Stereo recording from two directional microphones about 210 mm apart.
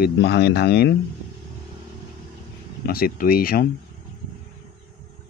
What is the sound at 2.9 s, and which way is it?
Speech, 45° left (ahead or behind).